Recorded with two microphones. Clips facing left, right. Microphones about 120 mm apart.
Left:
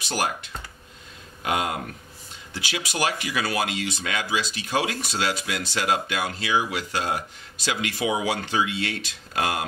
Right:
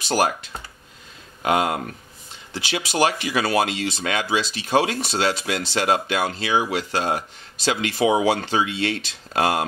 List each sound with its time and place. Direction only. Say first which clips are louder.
1.4 s speech: right 5 dB; 35° right (ahead or behind)